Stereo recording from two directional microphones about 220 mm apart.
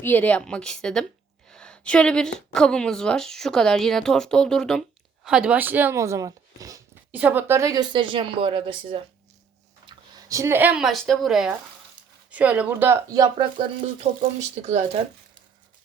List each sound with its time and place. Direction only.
0.0 s a woman's voice: 10° left (ahead or behind); by 13.7 s 15° right (ahead or behind)
13.8 s speech: 30° right (ahead or behind)